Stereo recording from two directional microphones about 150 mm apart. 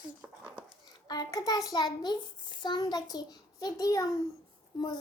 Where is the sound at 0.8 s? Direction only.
25° left (ahead or behind).